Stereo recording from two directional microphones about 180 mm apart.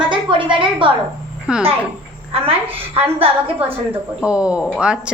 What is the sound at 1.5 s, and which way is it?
Speech, 10° right (ahead or behind).